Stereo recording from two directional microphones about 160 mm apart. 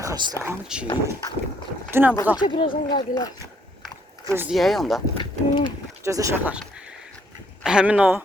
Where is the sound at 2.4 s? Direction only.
30° left (ahead or behind).